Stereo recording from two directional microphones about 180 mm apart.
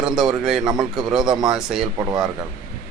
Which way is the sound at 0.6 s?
25° right (ahead or behind).